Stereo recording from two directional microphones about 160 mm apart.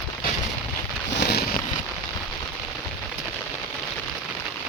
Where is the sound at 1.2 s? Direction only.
90° left.